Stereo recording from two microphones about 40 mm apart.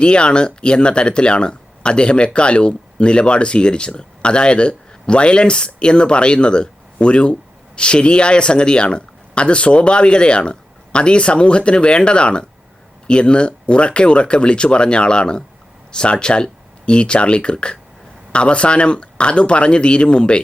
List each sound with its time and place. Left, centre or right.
0.0 s speech: left